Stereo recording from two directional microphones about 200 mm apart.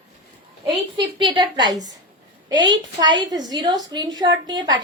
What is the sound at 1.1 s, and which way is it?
A woman's voice, 25° right (ahead or behind).